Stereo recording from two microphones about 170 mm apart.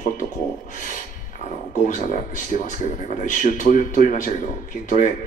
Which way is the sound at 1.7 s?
50° left (ahead or behind).